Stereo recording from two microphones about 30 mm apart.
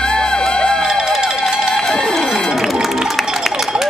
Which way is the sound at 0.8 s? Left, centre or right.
Centre.